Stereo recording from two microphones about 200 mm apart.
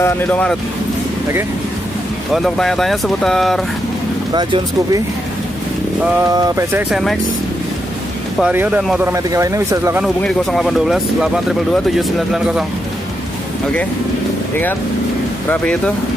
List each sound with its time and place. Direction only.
0.0 s speech: 5° left (ahead or behind)
2.3 s speech: centre (ahead or behind)
4.3 s speech: 20° right (ahead or behind)
6.0 s speech: 10° right (ahead or behind)
6.9 s speech: centre (ahead or behind)
8.4 s speech: 5° right (ahead or behind)
10.0 s speech: centre (ahead or behind)
15.5 s speech: 5° left (ahead or behind)